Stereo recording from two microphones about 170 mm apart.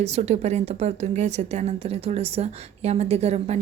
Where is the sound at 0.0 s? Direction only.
40° right (ahead or behind).